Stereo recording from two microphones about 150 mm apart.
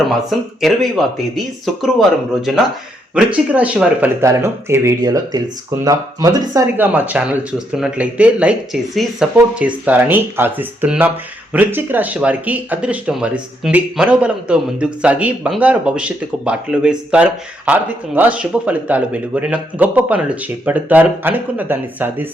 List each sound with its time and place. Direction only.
0.0 s speech: centre (ahead or behind); by 6.7 s 25° right (ahead or behind)
6.7 s speech: 10° right (ahead or behind)